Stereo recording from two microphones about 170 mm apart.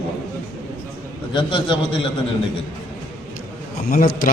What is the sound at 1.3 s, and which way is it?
Speech, 30° left (ahead or behind).